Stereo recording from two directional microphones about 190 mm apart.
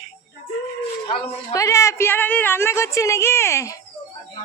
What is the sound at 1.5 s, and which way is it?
A woman's voice, 15° left (ahead or behind).